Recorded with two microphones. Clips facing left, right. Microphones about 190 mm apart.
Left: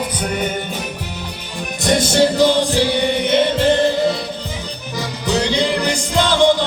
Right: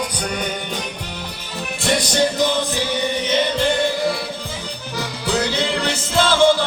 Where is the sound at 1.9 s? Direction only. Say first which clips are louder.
Left 4 dB; 25° left (ahead or behind).